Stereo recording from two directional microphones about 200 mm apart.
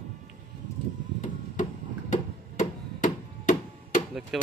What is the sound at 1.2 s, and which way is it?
Tick-tock, 40° left (ahead or behind).